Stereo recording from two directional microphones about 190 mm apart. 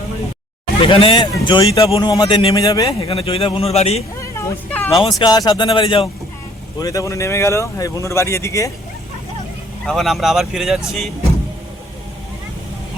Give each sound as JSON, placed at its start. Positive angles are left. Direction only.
{"t": 0.8, "sound": "a man's voice", "side_deg": 30}
{"t": 3.1, "sound": "a man's voice", "side_deg": 30}
{"t": 4.2, "sound": "hubbub", "side_deg": 15}
{"t": 5.0, "sound": "a man's voice", "side_deg": 20}
{"t": 9.8, "sound": "speech", "side_deg": 0}